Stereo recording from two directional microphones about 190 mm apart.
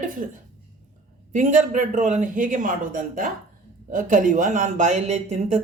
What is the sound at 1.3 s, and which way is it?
Speech, 40° right (ahead or behind).